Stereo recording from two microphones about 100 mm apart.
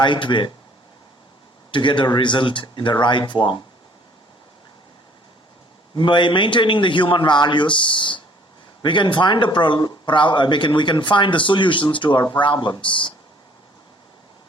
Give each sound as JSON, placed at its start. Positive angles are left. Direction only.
{"t": 0.0, "sound": "speech", "side_deg": 50}
{"t": 1.7, "sound": "speech", "side_deg": 55}
{"t": 6.0, "sound": "speech", "side_deg": 50}